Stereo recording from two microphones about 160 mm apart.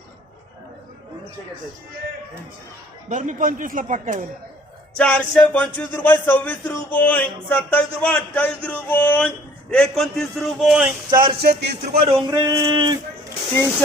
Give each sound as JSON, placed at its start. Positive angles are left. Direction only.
{"t": 3.1, "sound": "speech", "side_deg": -50}
{"t": 4.9, "sound": "music", "side_deg": 5}
{"t": 11.2, "sound": "a man's voice", "side_deg": -80}
{"t": 12.0, "sound": "speech", "side_deg": -30}